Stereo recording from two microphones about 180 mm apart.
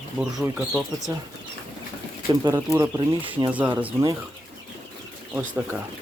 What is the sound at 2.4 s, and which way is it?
Speech, 15° right (ahead or behind).